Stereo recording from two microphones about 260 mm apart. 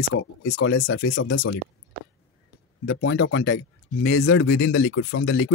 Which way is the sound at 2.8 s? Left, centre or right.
Left.